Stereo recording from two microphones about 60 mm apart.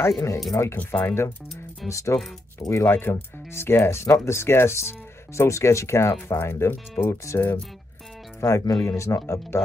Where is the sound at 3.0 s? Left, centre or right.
Left.